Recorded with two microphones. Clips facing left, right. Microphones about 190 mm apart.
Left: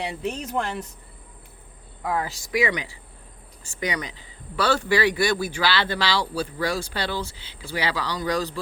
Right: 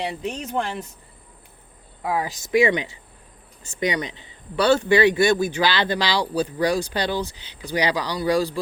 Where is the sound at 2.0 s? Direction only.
15° right (ahead or behind).